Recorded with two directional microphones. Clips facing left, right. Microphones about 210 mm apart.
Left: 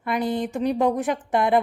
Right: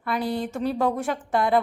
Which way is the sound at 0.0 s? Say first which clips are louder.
Left 2 dB; 20° left (ahead or behind).